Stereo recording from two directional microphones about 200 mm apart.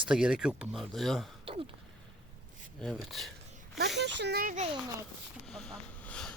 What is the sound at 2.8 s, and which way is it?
Speech, centre (ahead or behind).